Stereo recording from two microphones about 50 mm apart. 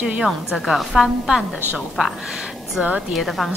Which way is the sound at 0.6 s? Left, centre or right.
Centre.